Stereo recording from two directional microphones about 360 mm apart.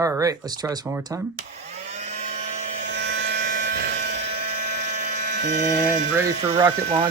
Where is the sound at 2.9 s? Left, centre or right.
Right.